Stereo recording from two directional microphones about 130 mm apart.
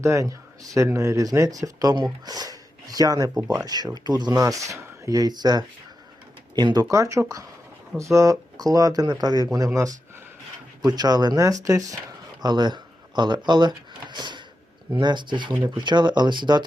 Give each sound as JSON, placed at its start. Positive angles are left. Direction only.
{"t": 0.0, "sound": "speech", "side_deg": -25}